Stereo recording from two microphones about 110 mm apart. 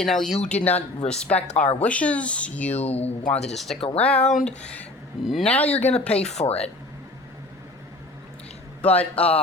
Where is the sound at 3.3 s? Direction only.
80° left.